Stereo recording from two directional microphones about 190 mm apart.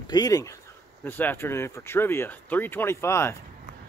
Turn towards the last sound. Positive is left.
turn(degrees=15)  # may be behind; listen again after turning